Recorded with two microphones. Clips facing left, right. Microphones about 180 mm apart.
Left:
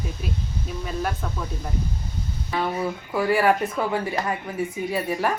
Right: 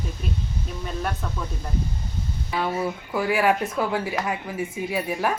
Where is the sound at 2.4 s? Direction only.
5° right (ahead or behind).